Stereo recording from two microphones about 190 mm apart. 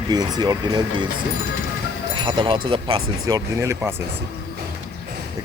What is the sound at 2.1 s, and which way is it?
Speech, 25° right (ahead or behind).